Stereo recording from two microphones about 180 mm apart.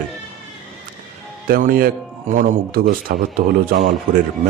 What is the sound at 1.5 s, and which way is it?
A man's voice, 50° right (ahead or behind).